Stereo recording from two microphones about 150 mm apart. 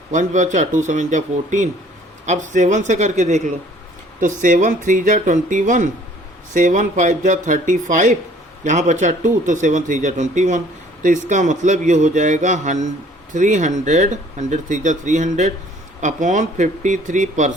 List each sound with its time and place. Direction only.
0.1 s speech: 55° right (ahead or behind)